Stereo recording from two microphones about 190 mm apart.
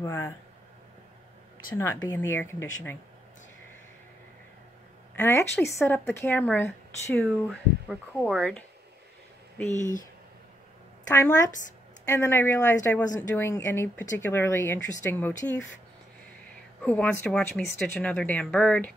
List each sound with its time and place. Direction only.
0.0 s a woman's voice: 15° left (ahead or behind)
2.1 s a woman's voice: 10° left (ahead or behind)
5.1 s a woman's voice: 10° left (ahead or behind)
7.2 s speech: 5° right (ahead or behind)
8.2 s speech: 5° left (ahead or behind)
9.8 s speech: 40° left (ahead or behind)
11.1 s a woman's voice: 15° left (ahead or behind)
16.8 s a woman's voice: 10° left (ahead or behind)